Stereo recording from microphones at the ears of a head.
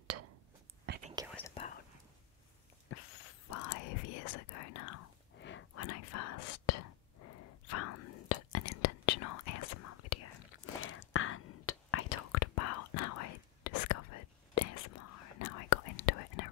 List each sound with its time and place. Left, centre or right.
0.0 s whispering: right
2.9 s whispering: left